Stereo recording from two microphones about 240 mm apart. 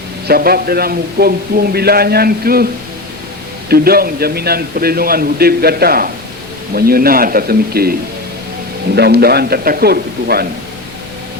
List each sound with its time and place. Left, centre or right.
0.3 s a man's voice: right
3.7 s a man's voice: right
9.0 s a man's voice: right